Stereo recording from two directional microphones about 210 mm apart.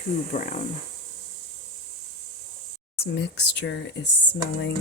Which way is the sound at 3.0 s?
55° left (ahead or behind).